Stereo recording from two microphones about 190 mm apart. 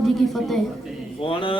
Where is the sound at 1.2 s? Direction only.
25° left (ahead or behind).